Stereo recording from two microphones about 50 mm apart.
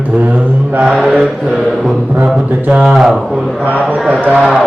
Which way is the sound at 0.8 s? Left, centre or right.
Right.